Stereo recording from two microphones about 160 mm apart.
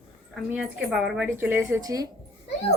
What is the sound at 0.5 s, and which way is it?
A woman's voice, 5° right (ahead or behind).